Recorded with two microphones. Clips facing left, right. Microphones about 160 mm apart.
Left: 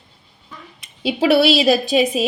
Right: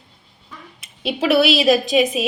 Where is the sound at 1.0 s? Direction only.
30° left (ahead or behind).